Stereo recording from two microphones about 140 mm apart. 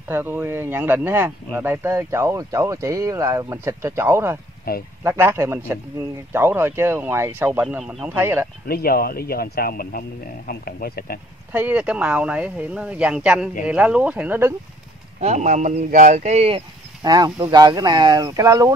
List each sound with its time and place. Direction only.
0.1 s speech: 15° right (ahead or behind)
4.7 s speech: 90° left
5.0 s speech: 15° right (ahead or behind)
8.1 s speech: 15° right (ahead or behind)
8.6 s speech: 90° left
11.5 s speech: 10° right (ahead or behind)
15.1 s speech: 55° right (ahead or behind)
17.0 s speech: 25° right (ahead or behind)